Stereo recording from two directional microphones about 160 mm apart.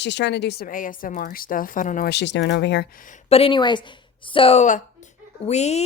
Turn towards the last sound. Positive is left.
turn(degrees=45)  # may be behind; listen again after turning